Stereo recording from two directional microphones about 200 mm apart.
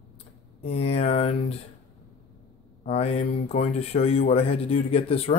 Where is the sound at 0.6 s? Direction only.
30° left (ahead or behind).